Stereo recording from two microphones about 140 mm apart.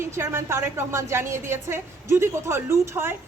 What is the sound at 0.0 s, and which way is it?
A woman's voice, 20° right (ahead or behind).